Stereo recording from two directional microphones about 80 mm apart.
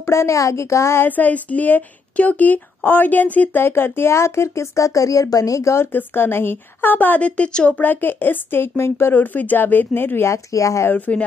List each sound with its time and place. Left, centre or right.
0.0 s a woman's voice: left
1.0 s a woman's voice: left
5.9 s a woman's voice: left
10.9 s a woman's voice: centre